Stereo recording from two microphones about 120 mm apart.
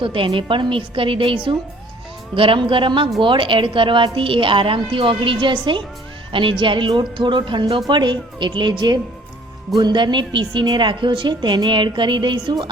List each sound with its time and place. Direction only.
0.0 s a woman's voice: 45° right (ahead or behind)